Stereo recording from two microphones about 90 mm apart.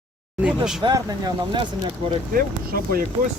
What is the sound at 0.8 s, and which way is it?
Speech, 60° right (ahead or behind).